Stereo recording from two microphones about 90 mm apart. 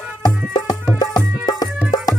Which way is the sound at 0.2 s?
50° left (ahead or behind).